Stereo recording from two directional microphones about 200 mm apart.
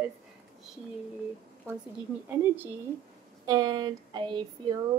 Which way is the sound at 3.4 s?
20° right (ahead or behind).